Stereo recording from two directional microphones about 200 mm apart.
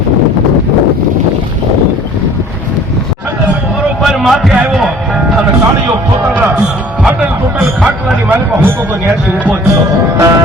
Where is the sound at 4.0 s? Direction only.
Centre (ahead or behind).